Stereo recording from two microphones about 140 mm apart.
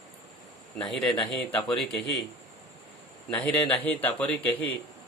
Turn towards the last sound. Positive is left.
turn(degrees=10)  # may be behind; listen again after turning